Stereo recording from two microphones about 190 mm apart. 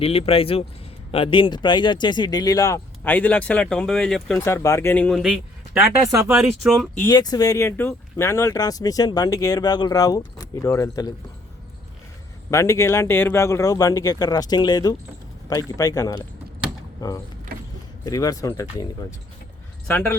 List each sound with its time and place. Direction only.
0.0 s speech: 30° left (ahead or behind); by 4.4 s 5° left (ahead or behind)
4.4 s speech: 15° left (ahead or behind)
5.7 s speech: 15° right (ahead or behind)
6.3 s speech: 5° right (ahead or behind)
7.0 s speech: 20° left (ahead or behind)
12.5 s speech: 15° left (ahead or behind)
18.0 s speech: 20° left (ahead or behind)
19.9 s speech: 10° left (ahead or behind)